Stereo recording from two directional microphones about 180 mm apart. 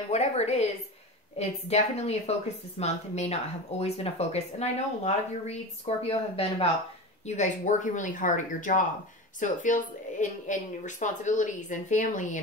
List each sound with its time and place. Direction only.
0.1 s a woman's voice: 35° left (ahead or behind)